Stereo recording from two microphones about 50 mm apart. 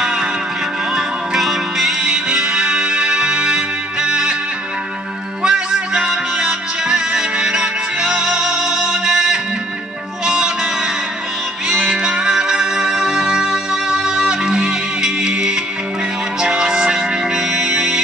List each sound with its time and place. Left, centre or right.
0.0 s music: centre
5.4 s music: centre
11.7 s music: centre